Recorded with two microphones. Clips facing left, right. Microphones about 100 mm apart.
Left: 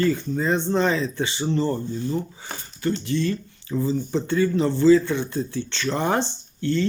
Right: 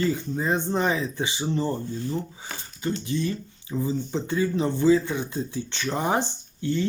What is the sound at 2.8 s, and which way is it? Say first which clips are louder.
Speech: left 3 dB; 20° right (ahead or behind).